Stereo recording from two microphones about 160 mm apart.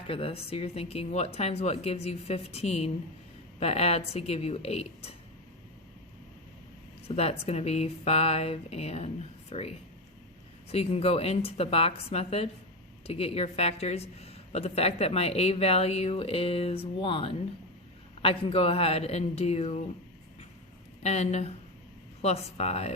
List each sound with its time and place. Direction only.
0.1 s a woman's voice: 35° left (ahead or behind)
7.2 s a woman's voice: 40° left (ahead or behind)
21.0 s a woman's voice: 45° left (ahead or behind)